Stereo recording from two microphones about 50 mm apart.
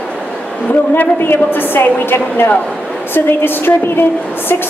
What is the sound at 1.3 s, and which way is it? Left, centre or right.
A woman's voice, left.